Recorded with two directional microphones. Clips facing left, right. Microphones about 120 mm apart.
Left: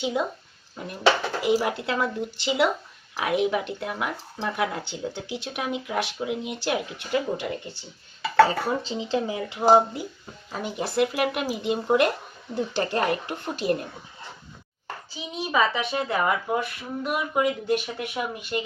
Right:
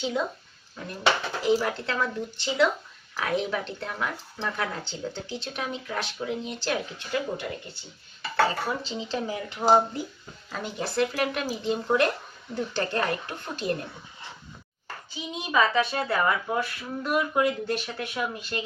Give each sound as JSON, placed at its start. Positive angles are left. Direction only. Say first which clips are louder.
{"t": 0.0, "sound": "speech", "louder": "left 2 dB", "side_deg": 10}
{"t": 1.4, "sound": "speech", "louder": "left 1 dB", "side_deg": 15}
{"t": 15.5, "sound": "speech", "louder": "right 1 dB", "side_deg": 20}